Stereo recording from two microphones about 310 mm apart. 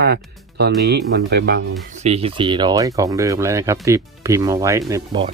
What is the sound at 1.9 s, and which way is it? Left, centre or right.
Speech, right.